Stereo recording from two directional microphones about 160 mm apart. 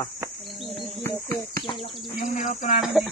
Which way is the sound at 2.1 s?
55° left (ahead or behind).